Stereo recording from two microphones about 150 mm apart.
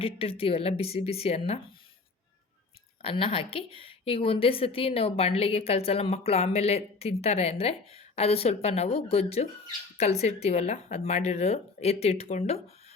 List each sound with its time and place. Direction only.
0.0 s a woman's voice: 40° left (ahead or behind)
3.0 s a woman's voice: 40° left (ahead or behind)